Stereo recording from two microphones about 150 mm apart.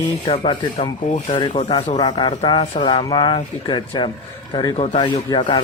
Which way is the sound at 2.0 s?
30° left (ahead or behind).